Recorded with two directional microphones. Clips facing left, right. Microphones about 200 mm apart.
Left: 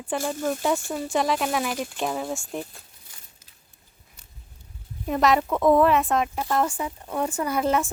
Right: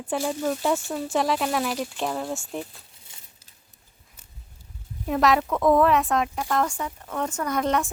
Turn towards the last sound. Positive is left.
turn(degrees=5)  # may be behind; listen again after turning